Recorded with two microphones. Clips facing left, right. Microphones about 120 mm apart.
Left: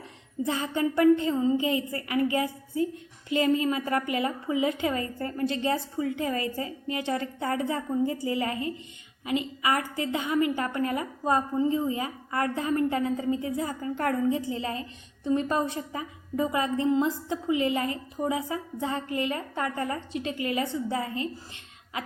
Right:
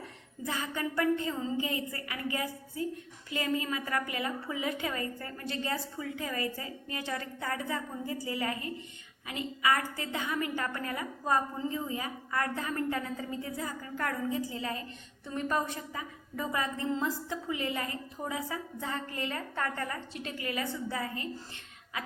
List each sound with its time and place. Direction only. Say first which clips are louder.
0.4 s a woman's voice: left 7 dB; 25° left (ahead or behind)